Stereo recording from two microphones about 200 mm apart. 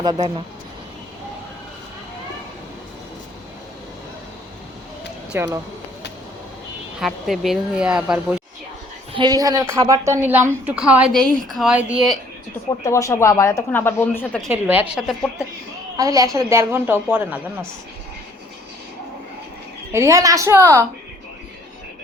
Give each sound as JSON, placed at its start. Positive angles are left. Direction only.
{"t": 0.0, "sound": "speech", "side_deg": -25}
{"t": 5.3, "sound": "speech", "side_deg": -10}
{"t": 7.0, "sound": "speech", "side_deg": 0}
{"t": 9.1, "sound": "a woman's voice", "side_deg": -20}
{"t": 12.8, "sound": "speech", "side_deg": 15}
{"t": 14.5, "sound": "speech", "side_deg": -10}
{"t": 16.0, "sound": "a woman's voice", "side_deg": -15}
{"t": 19.9, "sound": "a woman's voice", "side_deg": -15}